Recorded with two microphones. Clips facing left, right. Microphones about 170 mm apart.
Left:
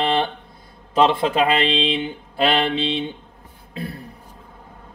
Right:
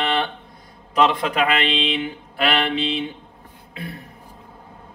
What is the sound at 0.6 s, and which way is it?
Speech, 30° left (ahead or behind).